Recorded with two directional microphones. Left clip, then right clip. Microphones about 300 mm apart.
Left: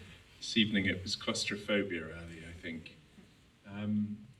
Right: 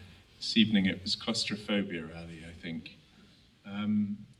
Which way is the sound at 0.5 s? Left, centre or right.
Centre.